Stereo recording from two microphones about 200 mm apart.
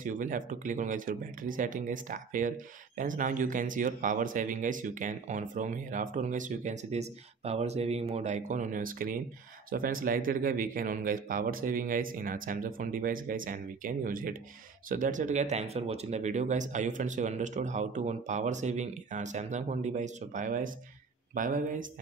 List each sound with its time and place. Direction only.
0.0 s speech: 40° right (ahead or behind)